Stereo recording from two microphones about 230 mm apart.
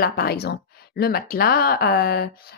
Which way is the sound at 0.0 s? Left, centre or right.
Left.